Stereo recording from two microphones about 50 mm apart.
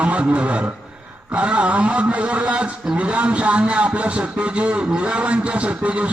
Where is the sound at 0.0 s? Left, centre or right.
Right.